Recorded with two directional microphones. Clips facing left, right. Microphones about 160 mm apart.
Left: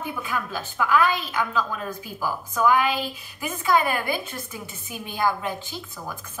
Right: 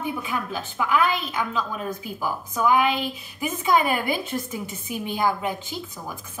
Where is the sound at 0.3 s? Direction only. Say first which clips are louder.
Right 1 dB; 20° right (ahead or behind).